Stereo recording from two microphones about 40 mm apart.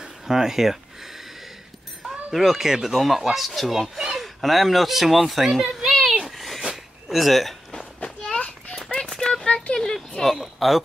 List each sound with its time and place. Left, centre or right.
0.0 s a sound: centre
2.0 s speech: centre
6.2 s cat: centre
7.1 s speech: centre
7.7 s children playing: centre
8.4 s children playing: left
9.1 s a sound: centre